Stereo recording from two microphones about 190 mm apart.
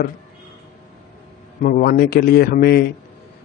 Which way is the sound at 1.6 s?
50° left (ahead or behind).